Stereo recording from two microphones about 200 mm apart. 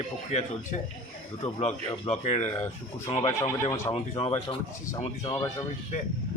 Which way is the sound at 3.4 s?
15° left (ahead or behind).